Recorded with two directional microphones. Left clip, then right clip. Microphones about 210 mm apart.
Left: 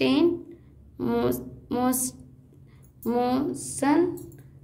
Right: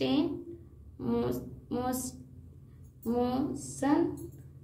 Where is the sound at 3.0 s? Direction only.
45° left (ahead or behind).